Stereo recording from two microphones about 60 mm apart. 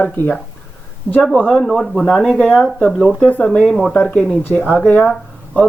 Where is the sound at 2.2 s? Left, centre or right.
Centre.